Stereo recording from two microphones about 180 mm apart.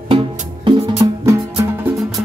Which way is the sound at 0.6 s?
30° right (ahead or behind).